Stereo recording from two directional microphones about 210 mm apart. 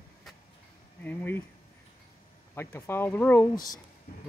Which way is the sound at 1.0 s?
10° left (ahead or behind).